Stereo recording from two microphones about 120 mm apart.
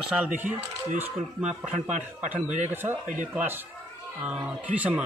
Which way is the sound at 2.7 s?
20° right (ahead or behind).